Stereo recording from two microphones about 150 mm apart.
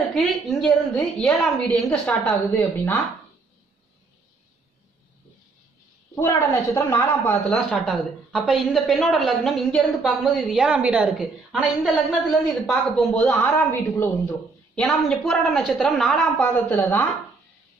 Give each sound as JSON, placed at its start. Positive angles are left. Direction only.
{"t": 0.1, "sound": "a woman's voice", "side_deg": 5}
{"t": 6.1, "sound": "a woman's voice", "side_deg": 15}
{"t": 7.5, "sound": "a woman's voice", "side_deg": 0}
{"t": 13.7, "sound": "a woman's voice", "side_deg": 15}
{"t": 14.8, "sound": "a woman's voice", "side_deg": 5}